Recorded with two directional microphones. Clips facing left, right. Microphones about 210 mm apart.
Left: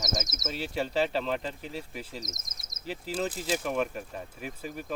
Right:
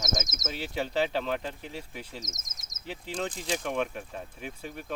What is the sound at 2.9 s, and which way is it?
Speech, 5° left (ahead or behind).